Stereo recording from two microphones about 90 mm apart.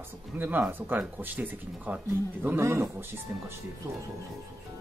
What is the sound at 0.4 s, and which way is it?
A man's voice, 20° right (ahead or behind).